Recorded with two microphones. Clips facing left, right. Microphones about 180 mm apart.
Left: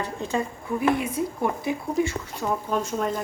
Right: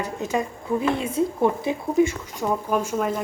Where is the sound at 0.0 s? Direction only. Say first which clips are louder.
Right 2 dB; 15° right (ahead or behind).